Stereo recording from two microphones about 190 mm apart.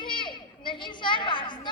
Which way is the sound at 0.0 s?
25° left (ahead or behind).